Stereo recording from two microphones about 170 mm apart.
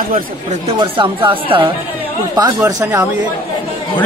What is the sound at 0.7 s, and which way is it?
Speech, 30° right (ahead or behind).